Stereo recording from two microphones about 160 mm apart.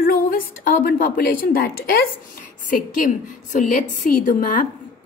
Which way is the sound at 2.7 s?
55° left (ahead or behind).